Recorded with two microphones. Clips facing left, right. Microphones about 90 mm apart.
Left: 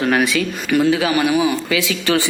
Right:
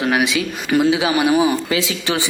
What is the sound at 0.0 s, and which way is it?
Speech, 15° right (ahead or behind).